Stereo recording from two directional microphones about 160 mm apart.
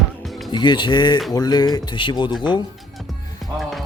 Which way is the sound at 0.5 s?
30° left (ahead or behind).